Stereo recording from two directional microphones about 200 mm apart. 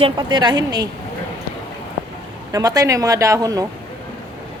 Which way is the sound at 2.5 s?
15° right (ahead or behind).